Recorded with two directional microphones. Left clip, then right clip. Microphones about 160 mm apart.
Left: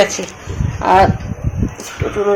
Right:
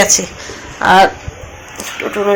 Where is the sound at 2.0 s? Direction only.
5° right (ahead or behind).